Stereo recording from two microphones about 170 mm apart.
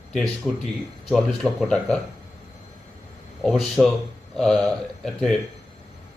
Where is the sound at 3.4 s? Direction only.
Centre (ahead or behind).